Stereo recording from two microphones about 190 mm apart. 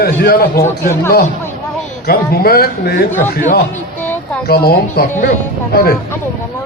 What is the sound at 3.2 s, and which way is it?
Speech, 40° left (ahead or behind).